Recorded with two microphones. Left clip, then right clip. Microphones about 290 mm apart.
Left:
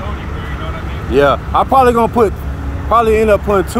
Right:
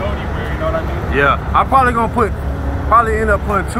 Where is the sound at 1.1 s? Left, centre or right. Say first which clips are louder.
Left 2 dB; left.